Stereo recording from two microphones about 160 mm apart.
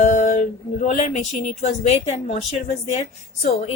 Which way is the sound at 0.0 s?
50° left (ahead or behind).